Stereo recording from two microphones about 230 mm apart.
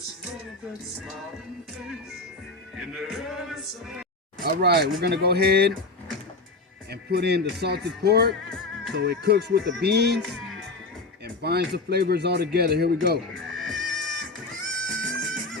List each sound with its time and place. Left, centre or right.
2.7 s music: centre
4.4 s speech: right
6.9 s speech: right
8.4 s music: centre
8.9 s speech: right
11.4 s speech: right
13.3 s music: centre